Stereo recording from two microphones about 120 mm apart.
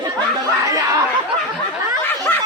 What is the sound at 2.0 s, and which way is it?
Snicker, 15° left (ahead or behind).